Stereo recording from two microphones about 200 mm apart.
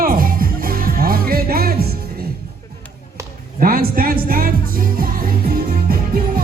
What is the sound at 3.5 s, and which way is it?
Music, 45° right (ahead or behind).